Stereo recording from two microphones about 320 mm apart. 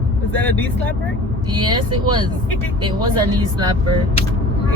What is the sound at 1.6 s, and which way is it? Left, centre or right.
Speech, centre.